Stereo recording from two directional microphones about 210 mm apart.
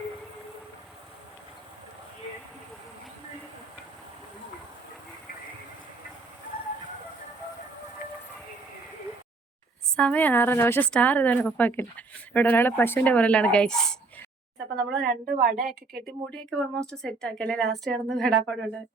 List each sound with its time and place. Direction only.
9.9 s a woman's voice: 5° left (ahead or behind)
14.8 s a woman's voice: 50° right (ahead or behind)
16.3 s speech: 5° left (ahead or behind)